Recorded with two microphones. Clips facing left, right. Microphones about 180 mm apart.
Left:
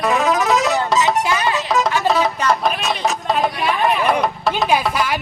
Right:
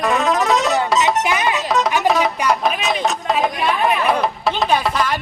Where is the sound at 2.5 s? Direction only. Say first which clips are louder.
Right 1 dB; centre (ahead or behind).